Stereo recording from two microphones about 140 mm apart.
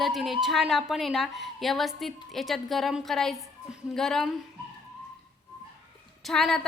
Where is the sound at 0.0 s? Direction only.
Centre (ahead or behind).